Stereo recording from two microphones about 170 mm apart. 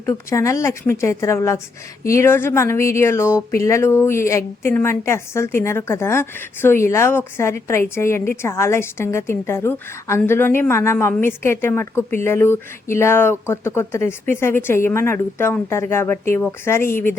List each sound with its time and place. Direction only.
0.0 s speech: 15° left (ahead or behind)